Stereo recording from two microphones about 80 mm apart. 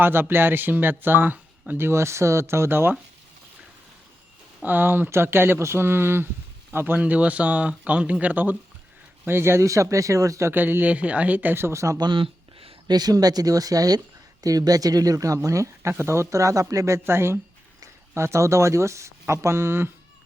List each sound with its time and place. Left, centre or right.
0.0 s speech: right
4.6 s speech: right
10.5 s speech: right
11.9 s a sound: right
13.0 s speech: right